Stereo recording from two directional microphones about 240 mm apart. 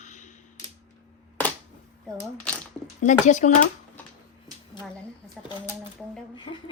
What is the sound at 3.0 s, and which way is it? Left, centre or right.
Speech, left.